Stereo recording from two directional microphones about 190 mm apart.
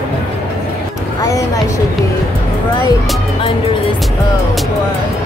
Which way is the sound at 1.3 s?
15° left (ahead or behind).